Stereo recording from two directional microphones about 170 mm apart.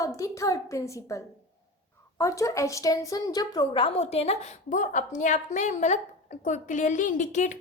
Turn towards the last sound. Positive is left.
turn(degrees=45)  # may be behind; listen again after turning